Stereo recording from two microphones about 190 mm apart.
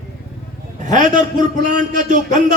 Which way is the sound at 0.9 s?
40° right (ahead or behind).